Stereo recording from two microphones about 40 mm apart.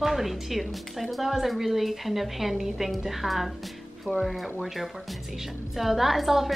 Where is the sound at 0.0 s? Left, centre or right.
Centre.